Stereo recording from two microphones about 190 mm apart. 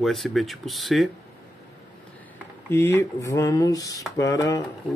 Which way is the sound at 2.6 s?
15° left (ahead or behind).